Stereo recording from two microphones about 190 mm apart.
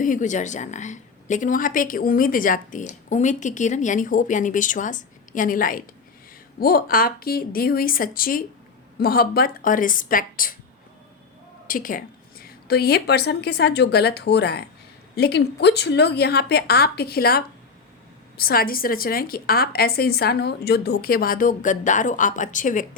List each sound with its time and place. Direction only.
0.0 s a woman's voice: 45° left (ahead or behind)
11.7 s a woman's voice: 45° left (ahead or behind)